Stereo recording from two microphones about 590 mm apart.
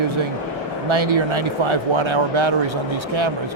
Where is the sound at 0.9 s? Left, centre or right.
Right.